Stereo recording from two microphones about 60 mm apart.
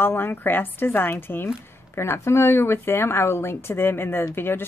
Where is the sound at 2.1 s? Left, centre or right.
Left.